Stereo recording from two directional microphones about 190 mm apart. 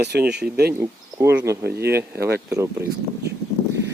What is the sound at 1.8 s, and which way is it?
Speech, 55° right (ahead or behind).